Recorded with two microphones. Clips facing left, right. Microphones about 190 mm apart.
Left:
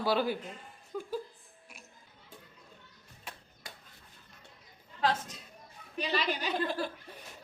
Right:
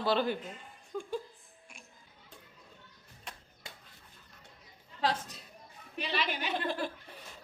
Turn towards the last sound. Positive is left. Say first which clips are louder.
# left 2 dB
turn(degrees=40)  # may be behind; listen again after turning